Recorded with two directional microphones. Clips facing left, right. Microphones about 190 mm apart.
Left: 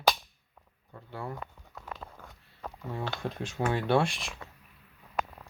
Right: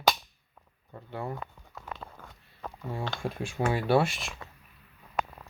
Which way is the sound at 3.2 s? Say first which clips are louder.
Right 2 dB; 10° right (ahead or behind).